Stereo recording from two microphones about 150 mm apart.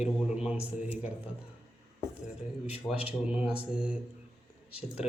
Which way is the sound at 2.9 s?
10° left (ahead or behind).